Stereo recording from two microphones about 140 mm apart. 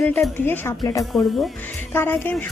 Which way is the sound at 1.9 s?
15° left (ahead or behind).